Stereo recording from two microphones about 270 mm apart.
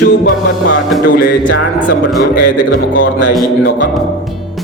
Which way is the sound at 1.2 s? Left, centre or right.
Left.